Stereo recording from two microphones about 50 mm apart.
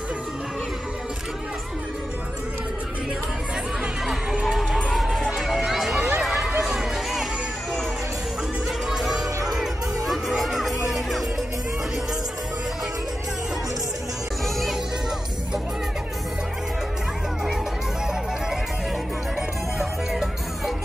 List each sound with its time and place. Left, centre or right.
4.0 s a sound: centre
4.9 s run: centre
5.9 s run: right
6.2 s run: centre
6.7 s music: centre
8.8 s music: centre
19.8 s music: centre